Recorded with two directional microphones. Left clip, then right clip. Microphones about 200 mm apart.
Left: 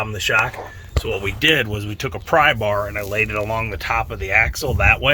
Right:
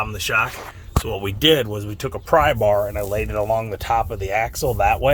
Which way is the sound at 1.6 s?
5° left (ahead or behind).